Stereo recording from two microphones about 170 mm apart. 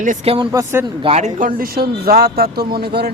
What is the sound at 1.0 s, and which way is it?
A man's voice, 40° right (ahead or behind).